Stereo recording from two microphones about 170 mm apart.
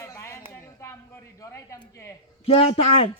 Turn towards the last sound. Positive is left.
turn(degrees=35)  # may be behind; listen again after turning